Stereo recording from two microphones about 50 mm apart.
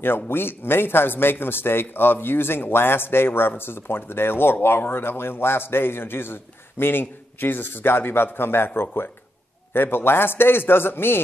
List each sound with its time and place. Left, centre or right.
0.0 s speech: left